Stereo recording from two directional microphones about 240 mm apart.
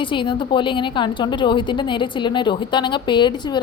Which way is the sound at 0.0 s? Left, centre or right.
Centre.